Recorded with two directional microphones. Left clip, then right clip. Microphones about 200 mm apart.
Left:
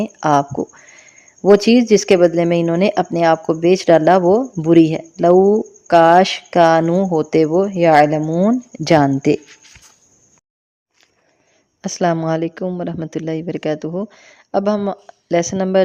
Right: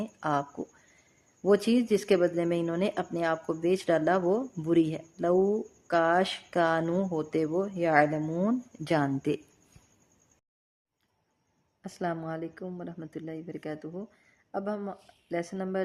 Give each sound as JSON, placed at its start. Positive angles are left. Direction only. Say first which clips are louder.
{"t": 0.0, "sound": "speech", "louder": "left 15 dB", "side_deg": 30}
{"t": 11.8, "sound": "speech", "louder": "left 16 dB", "side_deg": 40}